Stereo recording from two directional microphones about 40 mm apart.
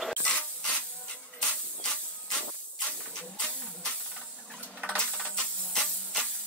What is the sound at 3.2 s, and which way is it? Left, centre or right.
Hiss, left.